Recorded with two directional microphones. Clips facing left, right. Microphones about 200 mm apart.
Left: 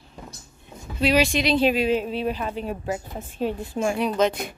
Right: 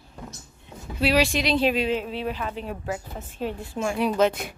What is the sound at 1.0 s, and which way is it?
A woman's voice, centre (ahead or behind).